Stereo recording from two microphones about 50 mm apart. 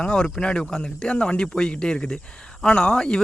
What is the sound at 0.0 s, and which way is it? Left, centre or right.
A man's voice, centre.